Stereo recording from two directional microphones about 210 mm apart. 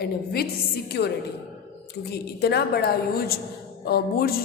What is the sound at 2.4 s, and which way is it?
A woman's voice, 50° left (ahead or behind).